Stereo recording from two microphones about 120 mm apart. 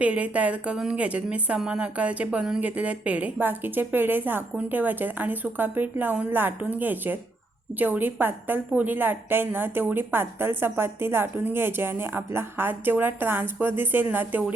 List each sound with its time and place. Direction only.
0.0 s a woman's voice: 10° right (ahead or behind)